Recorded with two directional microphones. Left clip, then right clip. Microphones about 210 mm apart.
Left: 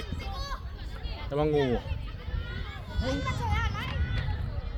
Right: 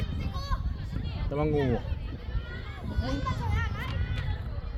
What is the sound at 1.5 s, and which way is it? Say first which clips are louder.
Speech: left 2 dB; 35° left (ahead or behind).